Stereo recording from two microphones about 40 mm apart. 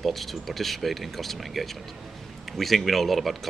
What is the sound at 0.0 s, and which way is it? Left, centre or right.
Speech, centre.